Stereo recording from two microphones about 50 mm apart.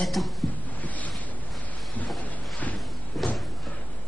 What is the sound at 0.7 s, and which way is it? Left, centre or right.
Boat, left.